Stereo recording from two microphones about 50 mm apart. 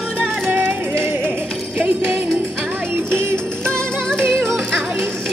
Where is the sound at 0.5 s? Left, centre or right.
Right.